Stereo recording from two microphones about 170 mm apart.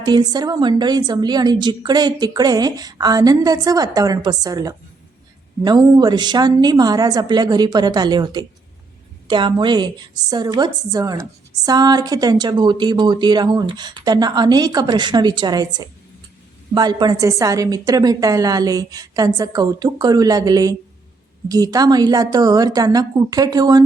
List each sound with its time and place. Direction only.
0.0 s a woman's voice: 25° right (ahead or behind)